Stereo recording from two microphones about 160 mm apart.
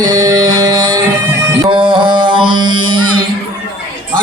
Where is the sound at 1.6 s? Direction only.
30° right (ahead or behind).